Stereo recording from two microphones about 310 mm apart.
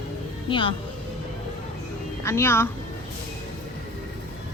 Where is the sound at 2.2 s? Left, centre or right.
Centre.